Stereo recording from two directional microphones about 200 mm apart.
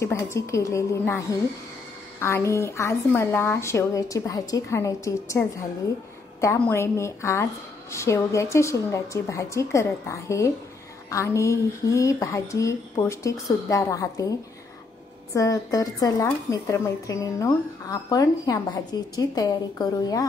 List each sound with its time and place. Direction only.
0.0 s speech: 15° left (ahead or behind)
6.4 s speech: 15° left (ahead or behind)
15.3 s speech: 15° left (ahead or behind)